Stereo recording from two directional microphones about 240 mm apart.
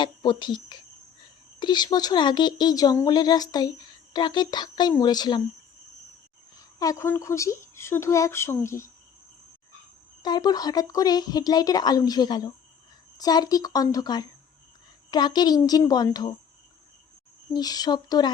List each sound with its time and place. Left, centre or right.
0.0 s speech: centre
6.6 s speech: centre
10.2 s speech: centre
17.5 s speech: centre